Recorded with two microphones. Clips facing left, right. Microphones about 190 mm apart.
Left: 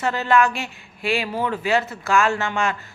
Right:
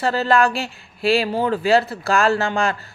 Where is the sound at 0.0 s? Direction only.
35° right (ahead or behind).